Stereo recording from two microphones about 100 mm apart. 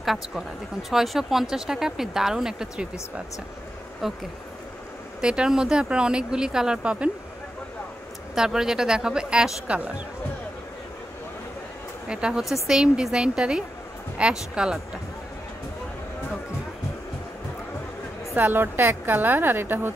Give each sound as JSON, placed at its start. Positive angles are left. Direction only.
{"t": 0.0, "sound": "speech", "side_deg": 0}
{"t": 4.0, "sound": "speech", "side_deg": -5}
{"t": 5.2, "sound": "speech", "side_deg": -10}
{"t": 8.4, "sound": "speech", "side_deg": -5}
{"t": 12.1, "sound": "speech", "side_deg": -10}
{"t": 18.3, "sound": "a woman's voice", "side_deg": -20}